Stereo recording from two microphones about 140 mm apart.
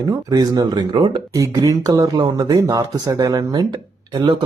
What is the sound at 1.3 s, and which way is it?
Speech, 25° right (ahead or behind).